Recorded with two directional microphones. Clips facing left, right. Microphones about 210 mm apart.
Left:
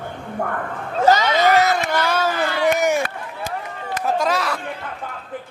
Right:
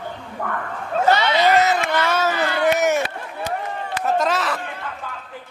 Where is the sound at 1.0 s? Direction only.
45° left (ahead or behind).